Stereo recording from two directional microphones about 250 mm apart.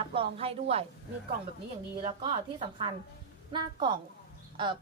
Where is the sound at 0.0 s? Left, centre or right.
Right.